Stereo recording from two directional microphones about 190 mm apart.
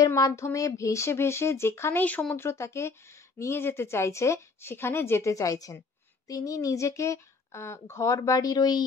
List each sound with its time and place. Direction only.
0.0 s speech: 15° left (ahead or behind)